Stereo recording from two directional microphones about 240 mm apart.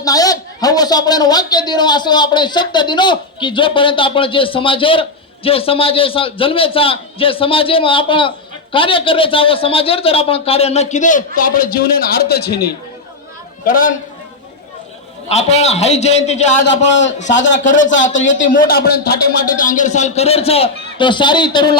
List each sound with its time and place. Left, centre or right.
0.0 s a man's voice: centre; by 12.6 s left
13.7 s a man's voice: left
15.3 s a man's voice: left
16.6 s a man's voice: left
17.5 s a man's voice: left